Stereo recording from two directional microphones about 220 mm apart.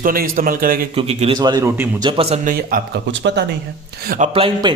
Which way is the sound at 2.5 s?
45° right (ahead or behind).